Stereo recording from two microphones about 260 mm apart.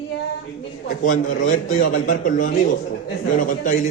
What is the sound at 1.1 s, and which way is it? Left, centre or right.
A man's voice, left.